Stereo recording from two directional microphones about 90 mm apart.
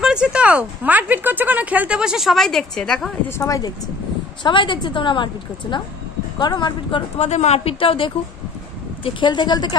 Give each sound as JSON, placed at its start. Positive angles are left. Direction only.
{"t": 0.0, "sound": "speech", "side_deg": -10}
{"t": 3.3, "sound": "speech", "side_deg": 35}
{"t": 4.4, "sound": "a woman's voice", "side_deg": 65}
{"t": 7.2, "sound": "speech", "side_deg": 90}
{"t": 9.3, "sound": "a woman's voice", "side_deg": 50}